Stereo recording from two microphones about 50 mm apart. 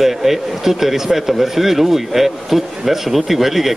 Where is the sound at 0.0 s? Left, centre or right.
Centre.